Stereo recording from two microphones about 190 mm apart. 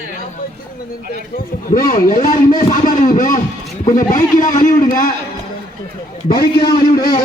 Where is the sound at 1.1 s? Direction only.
45° left (ahead or behind).